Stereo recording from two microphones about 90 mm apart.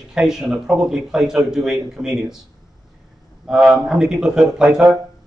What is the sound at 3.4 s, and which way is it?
Speech, 5° right (ahead or behind).